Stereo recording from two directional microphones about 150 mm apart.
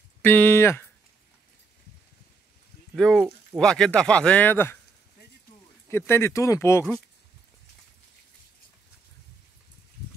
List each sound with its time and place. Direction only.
0.2 s speech: 10° left (ahead or behind)
3.0 s speech: centre (ahead or behind)
5.9 s speech: 15° left (ahead or behind)